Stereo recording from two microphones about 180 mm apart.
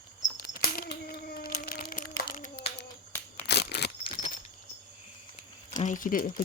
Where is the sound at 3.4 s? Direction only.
65° left (ahead or behind).